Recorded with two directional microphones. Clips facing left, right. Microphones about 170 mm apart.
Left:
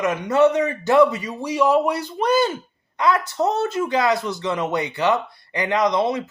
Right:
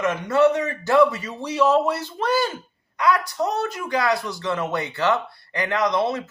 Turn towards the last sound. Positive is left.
turn(degrees=15)  # may be behind; listen again after turning